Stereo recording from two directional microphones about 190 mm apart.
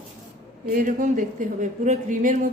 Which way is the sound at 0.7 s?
45° right (ahead or behind).